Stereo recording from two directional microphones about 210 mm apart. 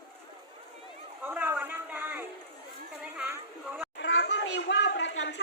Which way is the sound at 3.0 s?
5° right (ahead or behind).